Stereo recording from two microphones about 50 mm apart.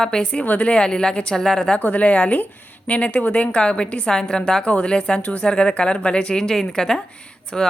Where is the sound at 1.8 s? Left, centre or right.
Left.